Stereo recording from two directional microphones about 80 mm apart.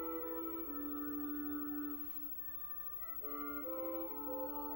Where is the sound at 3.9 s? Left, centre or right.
Left.